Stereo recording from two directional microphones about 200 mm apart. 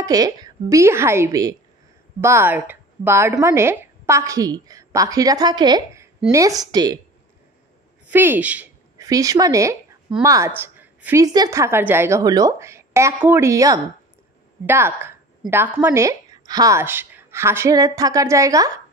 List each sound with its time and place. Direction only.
0.0 s a woman's voice: 20° right (ahead or behind)
8.1 s a woman's voice: 10° right (ahead or behind)